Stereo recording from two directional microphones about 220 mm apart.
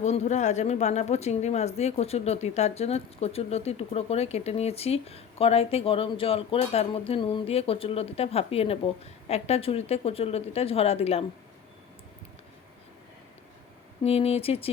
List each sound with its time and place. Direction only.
0.0 s speech: 30° left (ahead or behind)
14.0 s speech: 25° left (ahead or behind)